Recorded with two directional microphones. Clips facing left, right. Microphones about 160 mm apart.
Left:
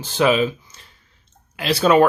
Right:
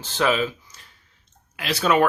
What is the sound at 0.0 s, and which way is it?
Speech, 15° left (ahead or behind).